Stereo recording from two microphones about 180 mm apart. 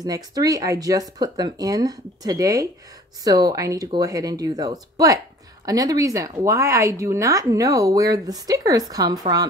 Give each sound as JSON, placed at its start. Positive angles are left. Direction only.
{"t": 0.0, "sound": "speech", "side_deg": -20}